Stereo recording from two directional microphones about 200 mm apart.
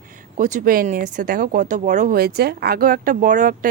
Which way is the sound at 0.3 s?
40° right (ahead or behind).